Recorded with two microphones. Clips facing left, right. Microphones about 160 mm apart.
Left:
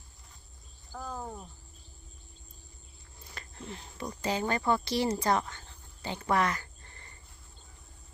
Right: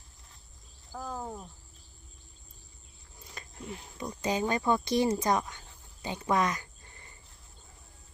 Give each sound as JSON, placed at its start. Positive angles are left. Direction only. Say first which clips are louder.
{"t": 0.9, "sound": "speech", "louder": "right 1 dB", "side_deg": -5}
{"t": 3.3, "sound": "a sound", "louder": "right 1 dB", "side_deg": -10}
{"t": 4.2, "sound": "speech", "louder": "right 1 dB", "side_deg": -15}